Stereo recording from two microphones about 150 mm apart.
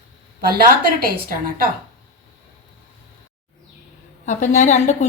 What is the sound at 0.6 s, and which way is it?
A woman's voice, 70° right (ahead or behind).